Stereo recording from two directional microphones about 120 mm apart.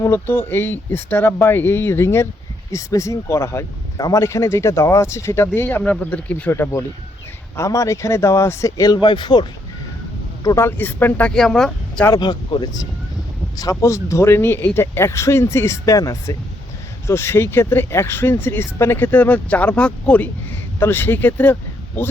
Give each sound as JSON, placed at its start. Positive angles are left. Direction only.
{"t": 0.0, "sound": "speech", "side_deg": 20}
{"t": 10.4, "sound": "speech", "side_deg": 25}
{"t": 12.2, "sound": "speech", "side_deg": 35}